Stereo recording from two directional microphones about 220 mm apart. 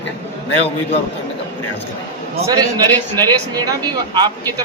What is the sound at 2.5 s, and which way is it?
Speech, 15° right (ahead or behind).